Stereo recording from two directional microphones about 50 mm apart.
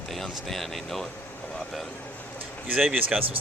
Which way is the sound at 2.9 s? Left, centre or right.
Right.